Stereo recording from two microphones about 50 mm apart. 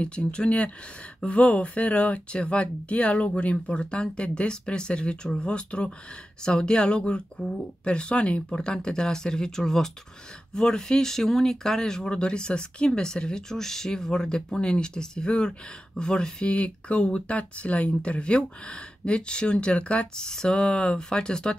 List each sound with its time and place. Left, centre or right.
0.0 s speech: centre
20.2 s speech: centre